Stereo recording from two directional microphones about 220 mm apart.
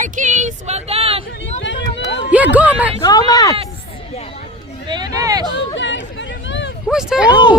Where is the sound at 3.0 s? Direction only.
15° left (ahead or behind).